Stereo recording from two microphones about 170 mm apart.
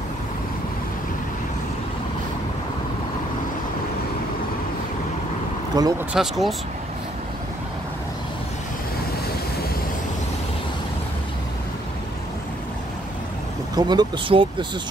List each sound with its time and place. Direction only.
5.7 s speech: 25° right (ahead or behind)
6.1 s speech: centre (ahead or behind)
13.7 s speech: 25° right (ahead or behind)